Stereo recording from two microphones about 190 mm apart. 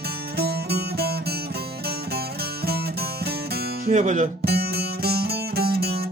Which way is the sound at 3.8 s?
40° right (ahead or behind).